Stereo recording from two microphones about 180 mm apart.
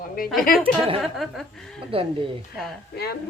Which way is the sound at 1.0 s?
Centre (ahead or behind).